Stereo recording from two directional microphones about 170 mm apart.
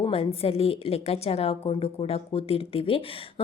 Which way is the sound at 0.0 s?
35° left (ahead or behind).